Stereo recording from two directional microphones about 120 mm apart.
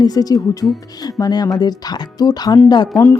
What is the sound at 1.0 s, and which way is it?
Speech, 35° left (ahead or behind).